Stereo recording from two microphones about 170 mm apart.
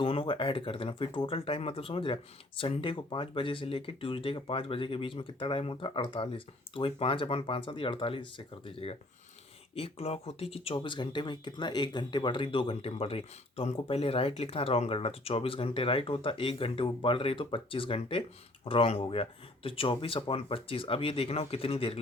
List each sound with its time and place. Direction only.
0.0 s speech: 30° left (ahead or behind)